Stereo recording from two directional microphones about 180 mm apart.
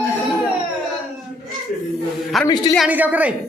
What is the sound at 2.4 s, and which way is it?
Speech, 20° left (ahead or behind).